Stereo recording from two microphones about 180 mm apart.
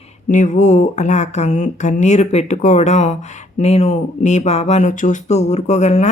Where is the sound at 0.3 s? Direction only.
45° left (ahead or behind).